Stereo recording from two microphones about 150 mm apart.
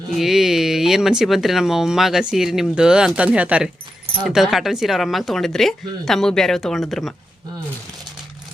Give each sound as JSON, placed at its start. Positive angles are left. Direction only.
{"t": 0.1, "sound": "speech", "side_deg": 0}